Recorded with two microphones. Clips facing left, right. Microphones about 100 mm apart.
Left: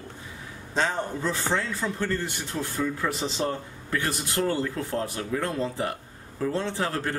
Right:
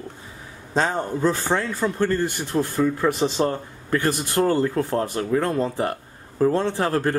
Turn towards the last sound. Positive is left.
turn(degrees=-50)  # may be behind; listen again after turning